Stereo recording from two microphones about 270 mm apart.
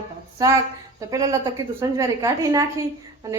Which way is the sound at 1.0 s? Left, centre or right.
Centre.